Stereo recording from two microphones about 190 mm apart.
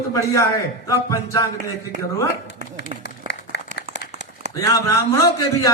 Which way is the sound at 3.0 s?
65° left (ahead or behind).